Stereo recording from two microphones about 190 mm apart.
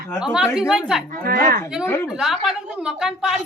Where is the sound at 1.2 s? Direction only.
50° right (ahead or behind).